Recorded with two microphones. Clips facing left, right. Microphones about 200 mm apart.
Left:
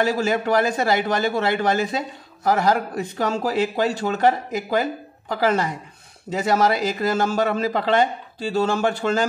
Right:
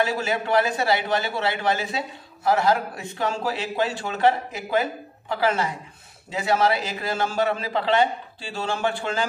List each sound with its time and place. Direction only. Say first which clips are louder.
0.0 s a man's voice: left 4 dB; 45° left (ahead or behind)